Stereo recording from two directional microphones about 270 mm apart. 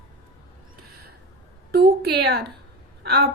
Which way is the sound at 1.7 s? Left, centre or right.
Right.